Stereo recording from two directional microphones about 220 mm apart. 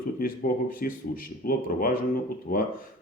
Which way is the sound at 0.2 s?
40° left (ahead or behind).